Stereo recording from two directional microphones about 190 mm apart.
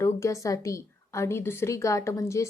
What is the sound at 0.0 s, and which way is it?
A woman's voice, 15° left (ahead or behind).